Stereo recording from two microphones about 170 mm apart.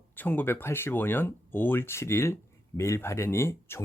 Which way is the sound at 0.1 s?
10° left (ahead or behind).